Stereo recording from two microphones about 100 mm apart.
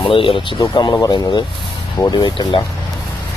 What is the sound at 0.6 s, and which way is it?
Speech, 35° left (ahead or behind).